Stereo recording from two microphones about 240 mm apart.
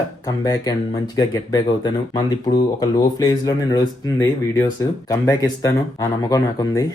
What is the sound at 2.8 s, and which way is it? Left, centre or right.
Speech, centre.